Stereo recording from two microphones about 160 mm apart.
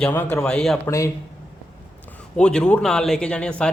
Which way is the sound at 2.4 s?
5° left (ahead or behind).